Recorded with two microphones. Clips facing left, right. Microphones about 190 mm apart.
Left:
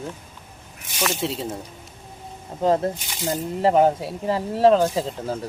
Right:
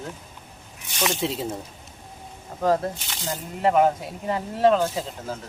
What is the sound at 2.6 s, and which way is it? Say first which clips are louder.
Speech: left 2 dB; 25° left (ahead or behind).